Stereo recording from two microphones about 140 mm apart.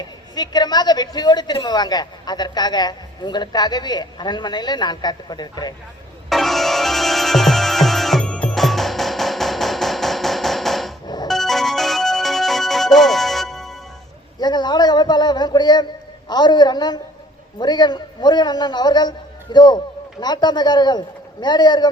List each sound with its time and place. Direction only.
0.0 s a woman's voice: 30° left (ahead or behind)
6.2 s music: centre (ahead or behind)
11.0 s music: 30° left (ahead or behind)
11.3 s music: centre (ahead or behind)
14.3 s a woman's voice: 30° left (ahead or behind)